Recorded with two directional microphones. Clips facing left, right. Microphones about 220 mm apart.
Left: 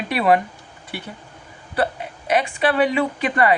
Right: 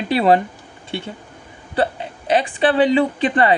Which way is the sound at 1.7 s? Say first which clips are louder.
Right 2 dB; 30° right (ahead or behind).